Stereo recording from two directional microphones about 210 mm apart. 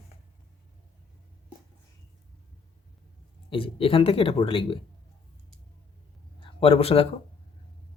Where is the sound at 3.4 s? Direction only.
25° left (ahead or behind).